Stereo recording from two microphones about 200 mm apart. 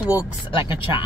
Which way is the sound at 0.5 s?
25° left (ahead or behind).